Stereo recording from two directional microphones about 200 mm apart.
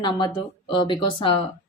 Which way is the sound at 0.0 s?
20° left (ahead or behind).